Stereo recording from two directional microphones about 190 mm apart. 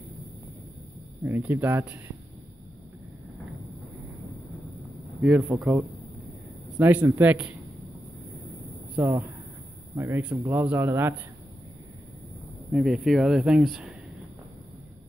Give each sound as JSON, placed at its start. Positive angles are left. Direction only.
{"t": 1.2, "sound": "speech", "side_deg": -10}
{"t": 5.2, "sound": "speech", "side_deg": 0}
{"t": 8.9, "sound": "speech", "side_deg": -15}
{"t": 12.7, "sound": "speech", "side_deg": 0}